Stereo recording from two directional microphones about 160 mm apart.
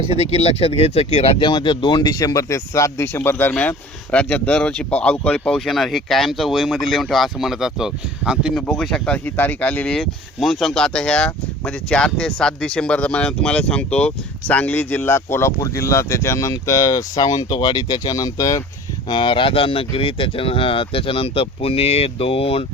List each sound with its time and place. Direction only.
0.1 s speech: 40° left (ahead or behind)